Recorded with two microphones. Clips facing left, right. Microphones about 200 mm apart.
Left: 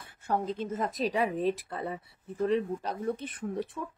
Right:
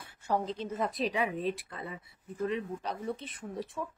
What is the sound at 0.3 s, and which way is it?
A woman's voice, 50° left (ahead or behind).